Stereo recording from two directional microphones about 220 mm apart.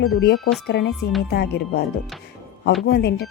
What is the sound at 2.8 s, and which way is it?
Speech, 45° left (ahead or behind).